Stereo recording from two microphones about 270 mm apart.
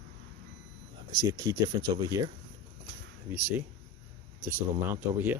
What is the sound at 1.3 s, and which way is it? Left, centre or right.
Speech, centre.